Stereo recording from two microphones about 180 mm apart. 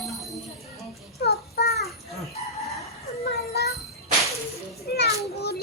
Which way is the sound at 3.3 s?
65° left (ahead or behind).